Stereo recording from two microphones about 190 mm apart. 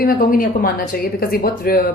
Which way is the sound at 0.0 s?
50° left (ahead or behind).